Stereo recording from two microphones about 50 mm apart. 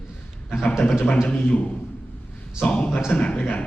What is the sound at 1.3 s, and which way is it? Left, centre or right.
Speech, left.